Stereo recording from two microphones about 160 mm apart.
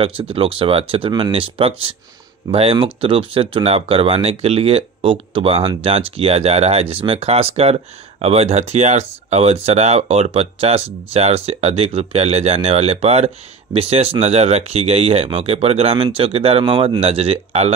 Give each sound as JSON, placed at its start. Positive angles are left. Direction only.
{"t": 0.0, "sound": "speech", "side_deg": -35}